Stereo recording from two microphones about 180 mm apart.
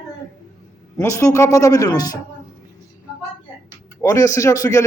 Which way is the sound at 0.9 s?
15° left (ahead or behind).